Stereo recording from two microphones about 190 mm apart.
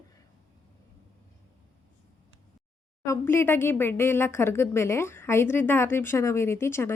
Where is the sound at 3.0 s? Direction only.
15° left (ahead or behind).